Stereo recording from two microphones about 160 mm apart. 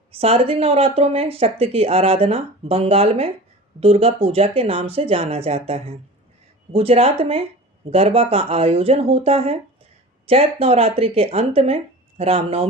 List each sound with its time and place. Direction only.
0.1 s speech: 35° right (ahead or behind)